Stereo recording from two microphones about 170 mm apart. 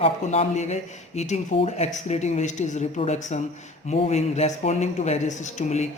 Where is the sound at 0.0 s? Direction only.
40° left (ahead or behind).